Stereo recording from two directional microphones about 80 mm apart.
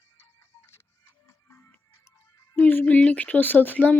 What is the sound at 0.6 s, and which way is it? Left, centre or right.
Music, left.